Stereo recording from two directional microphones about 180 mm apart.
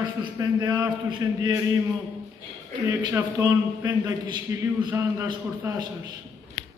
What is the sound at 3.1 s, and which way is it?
A man's voice, 10° right (ahead or behind).